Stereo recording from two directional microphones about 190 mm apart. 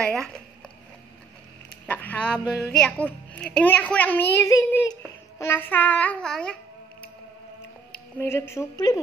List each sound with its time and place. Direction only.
0.0 s speech: 5° left (ahead or behind)
1.9 s a sound: 10° left (ahead or behind)
2.7 s a woman's voice: 5° left (ahead or behind)